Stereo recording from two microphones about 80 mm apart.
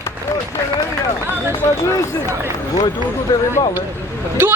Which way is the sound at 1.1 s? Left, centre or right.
Right.